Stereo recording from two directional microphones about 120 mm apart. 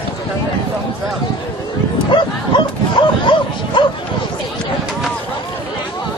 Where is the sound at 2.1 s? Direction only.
40° left (ahead or behind).